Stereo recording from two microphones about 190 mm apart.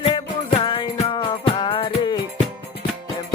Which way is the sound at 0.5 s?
25° left (ahead or behind).